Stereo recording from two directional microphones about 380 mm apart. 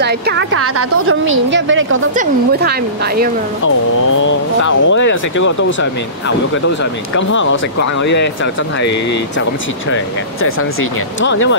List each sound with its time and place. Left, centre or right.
0.0 s a woman's voice: right
1.5 s a woman's voice: right
3.6 s speech: left
10.4 s speech: left